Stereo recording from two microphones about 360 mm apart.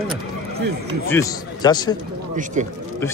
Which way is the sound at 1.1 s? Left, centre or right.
Centre.